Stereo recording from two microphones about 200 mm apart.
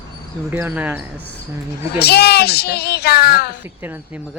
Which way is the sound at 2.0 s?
55° left (ahead or behind).